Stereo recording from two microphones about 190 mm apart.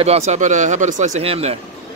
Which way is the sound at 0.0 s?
35° right (ahead or behind).